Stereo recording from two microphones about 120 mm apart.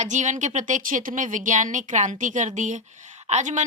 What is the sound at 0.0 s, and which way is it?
Speech, 90° right.